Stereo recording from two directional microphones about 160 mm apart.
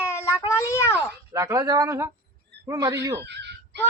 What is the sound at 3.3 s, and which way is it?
Wail, 90° right.